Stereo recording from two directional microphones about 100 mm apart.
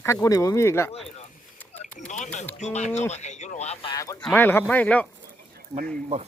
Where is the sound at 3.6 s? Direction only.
90° left.